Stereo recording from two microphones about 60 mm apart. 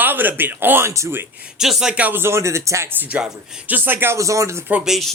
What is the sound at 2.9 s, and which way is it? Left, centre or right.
Speech, right.